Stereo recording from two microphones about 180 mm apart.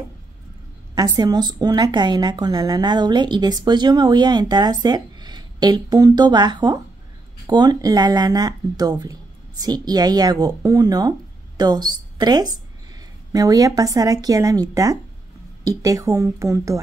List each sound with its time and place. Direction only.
0.9 s a woman's voice: 20° right (ahead or behind)